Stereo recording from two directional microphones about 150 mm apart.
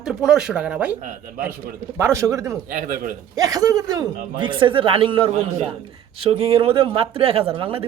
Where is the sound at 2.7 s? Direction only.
65° right (ahead or behind).